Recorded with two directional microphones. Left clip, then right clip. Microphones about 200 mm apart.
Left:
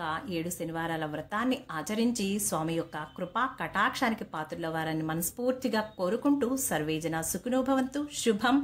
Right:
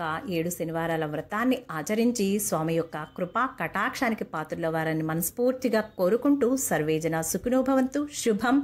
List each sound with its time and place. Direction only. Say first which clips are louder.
0.0 s a woman's voice: right 4 dB; 20° right (ahead or behind)